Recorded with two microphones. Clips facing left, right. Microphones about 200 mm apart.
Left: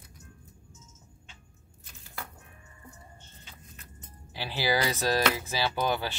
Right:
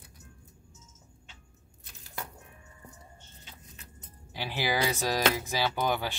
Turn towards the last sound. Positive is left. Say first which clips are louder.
# even
turn(degrees=-15)  # may be behind; listen again after turning